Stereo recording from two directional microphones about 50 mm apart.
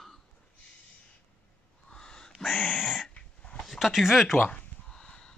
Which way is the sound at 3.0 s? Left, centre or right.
Left.